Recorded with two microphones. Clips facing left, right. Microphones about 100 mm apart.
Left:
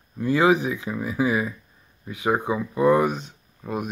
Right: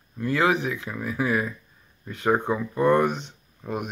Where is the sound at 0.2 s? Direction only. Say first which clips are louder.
Left 3 dB; 15° left (ahead or behind).